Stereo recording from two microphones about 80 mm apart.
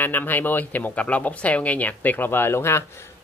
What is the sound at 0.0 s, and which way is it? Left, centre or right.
Speech, left.